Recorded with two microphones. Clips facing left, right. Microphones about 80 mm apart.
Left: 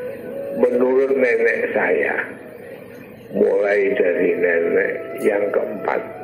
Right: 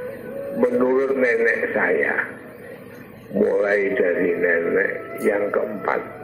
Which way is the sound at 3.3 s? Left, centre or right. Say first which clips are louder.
Left 2 dB; right.